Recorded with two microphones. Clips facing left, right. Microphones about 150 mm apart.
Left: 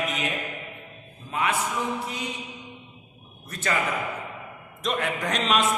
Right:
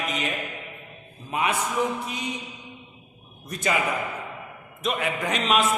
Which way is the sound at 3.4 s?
15° right (ahead or behind).